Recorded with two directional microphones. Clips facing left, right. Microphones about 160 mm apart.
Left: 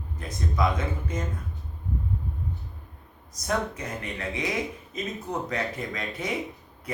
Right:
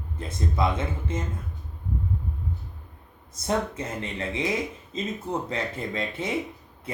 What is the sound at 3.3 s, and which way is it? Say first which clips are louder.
Speech: right 2 dB; 25° right (ahead or behind).